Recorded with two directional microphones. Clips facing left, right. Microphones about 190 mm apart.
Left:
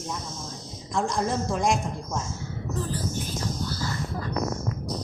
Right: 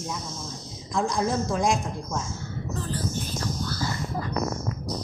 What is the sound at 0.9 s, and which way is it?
Speech, centre (ahead or behind).